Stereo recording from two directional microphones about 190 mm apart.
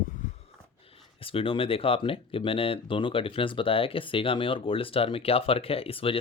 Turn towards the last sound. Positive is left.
turn(degrees=30)  # may be behind; listen again after turning